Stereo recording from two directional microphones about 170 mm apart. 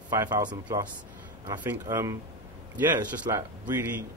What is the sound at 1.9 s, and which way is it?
Speech, 20° right (ahead or behind).